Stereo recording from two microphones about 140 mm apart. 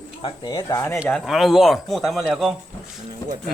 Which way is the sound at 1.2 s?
5° right (ahead or behind).